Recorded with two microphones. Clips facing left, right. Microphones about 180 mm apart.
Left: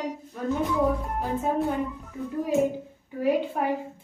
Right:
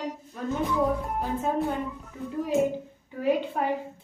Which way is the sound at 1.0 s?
Centre (ahead or behind).